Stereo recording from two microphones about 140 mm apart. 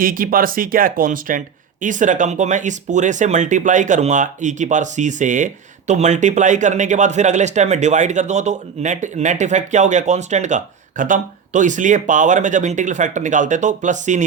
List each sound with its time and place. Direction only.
0.0 s speech: 90° right
1.8 s speech: 65° right (ahead or behind)